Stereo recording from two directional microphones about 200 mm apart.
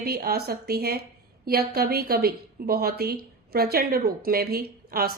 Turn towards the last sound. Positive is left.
turn(degrees=-50)  # may be behind; listen again after turning